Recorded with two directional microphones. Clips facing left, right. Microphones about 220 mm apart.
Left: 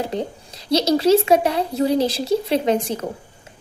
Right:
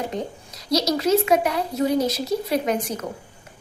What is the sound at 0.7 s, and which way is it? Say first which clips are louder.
A woman's voice: left 4 dB; 30° left (ahead or behind).